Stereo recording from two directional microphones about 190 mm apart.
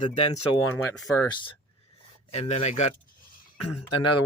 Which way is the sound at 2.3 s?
35° left (ahead or behind).